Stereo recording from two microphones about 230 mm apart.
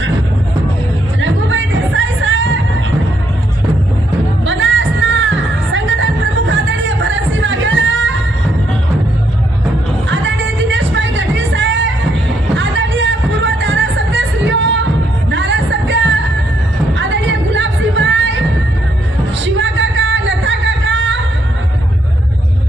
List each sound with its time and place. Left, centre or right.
1.2 s music: right
4.4 s music: right
10.1 s music: right
19.4 s music: right